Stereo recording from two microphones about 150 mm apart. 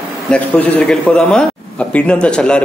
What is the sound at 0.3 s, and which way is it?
A man's voice, 10° left (ahead or behind).